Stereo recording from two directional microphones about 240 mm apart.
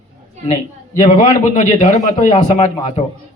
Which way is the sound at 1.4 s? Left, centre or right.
Left.